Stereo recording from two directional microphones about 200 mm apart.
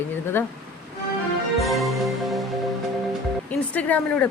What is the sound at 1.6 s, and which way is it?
Music, centre (ahead or behind).